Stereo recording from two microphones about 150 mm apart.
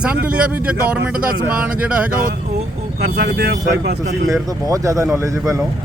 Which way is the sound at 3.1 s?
90° right.